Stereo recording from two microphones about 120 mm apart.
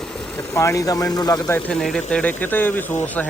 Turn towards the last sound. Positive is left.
turn(degrees=15)  # may be behind; listen again after turning